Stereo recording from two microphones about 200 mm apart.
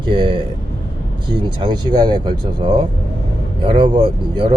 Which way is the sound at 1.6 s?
20° right (ahead or behind).